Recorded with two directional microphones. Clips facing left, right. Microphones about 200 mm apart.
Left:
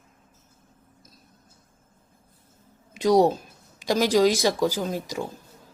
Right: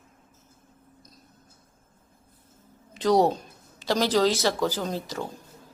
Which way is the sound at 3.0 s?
10° left (ahead or behind).